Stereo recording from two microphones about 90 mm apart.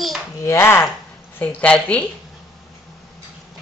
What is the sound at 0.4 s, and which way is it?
Speech, 30° left (ahead or behind).